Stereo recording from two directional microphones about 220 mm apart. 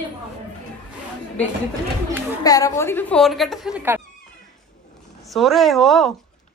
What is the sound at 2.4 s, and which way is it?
A woman's voice, 15° left (ahead or behind).